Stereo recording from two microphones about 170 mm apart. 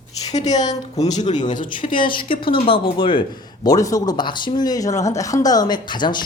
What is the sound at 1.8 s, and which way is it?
Speech, 30° left (ahead or behind).